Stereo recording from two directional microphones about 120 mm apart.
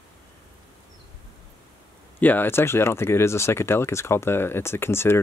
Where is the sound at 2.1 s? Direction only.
15° left (ahead or behind).